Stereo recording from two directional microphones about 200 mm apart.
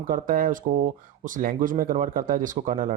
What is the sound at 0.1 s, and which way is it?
Speech, 45° right (ahead or behind).